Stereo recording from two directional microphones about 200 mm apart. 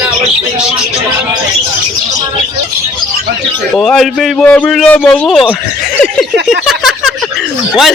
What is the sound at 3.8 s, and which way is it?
A man's voice, centre (ahead or behind).